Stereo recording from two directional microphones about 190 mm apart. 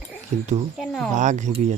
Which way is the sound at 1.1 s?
40° right (ahead or behind).